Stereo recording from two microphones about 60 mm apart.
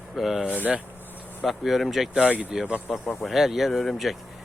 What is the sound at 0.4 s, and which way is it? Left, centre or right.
Speech, left.